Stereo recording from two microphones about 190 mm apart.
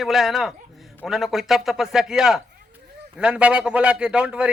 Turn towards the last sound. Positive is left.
turn(degrees=-5)  # may be behind; listen again after turning